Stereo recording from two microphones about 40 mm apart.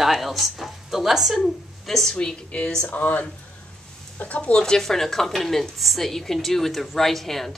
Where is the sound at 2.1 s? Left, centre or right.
Left.